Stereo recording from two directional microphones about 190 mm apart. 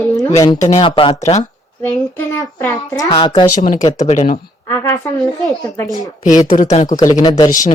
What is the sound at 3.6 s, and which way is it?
Speech, 40° left (ahead or behind).